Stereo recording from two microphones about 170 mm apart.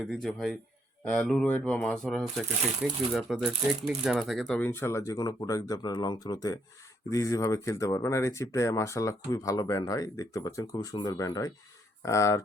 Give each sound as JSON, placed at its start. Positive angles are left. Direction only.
{"t": 0.0, "sound": "a man's voice", "side_deg": 0}